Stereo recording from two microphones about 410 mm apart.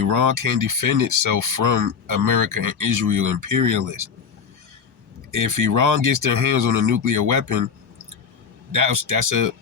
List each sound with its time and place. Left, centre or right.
0.1 s speech: right
5.3 s speech: right
8.7 s speech: right